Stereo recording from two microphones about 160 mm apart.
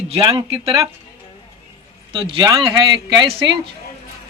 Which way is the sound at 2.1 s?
30° right (ahead or behind).